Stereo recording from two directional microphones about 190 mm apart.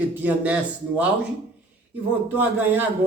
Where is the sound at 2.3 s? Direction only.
10° right (ahead or behind).